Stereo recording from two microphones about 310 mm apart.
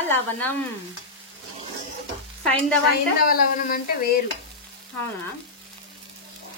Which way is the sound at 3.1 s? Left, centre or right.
Left.